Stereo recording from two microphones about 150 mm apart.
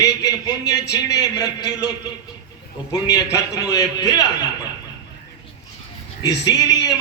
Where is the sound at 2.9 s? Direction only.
25° left (ahead or behind).